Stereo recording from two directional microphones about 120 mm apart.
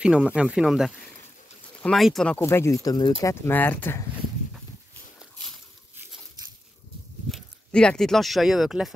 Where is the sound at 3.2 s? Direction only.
20° left (ahead or behind).